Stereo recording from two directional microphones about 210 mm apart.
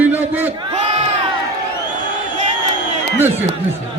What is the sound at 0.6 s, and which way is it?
Crowd, 25° right (ahead or behind).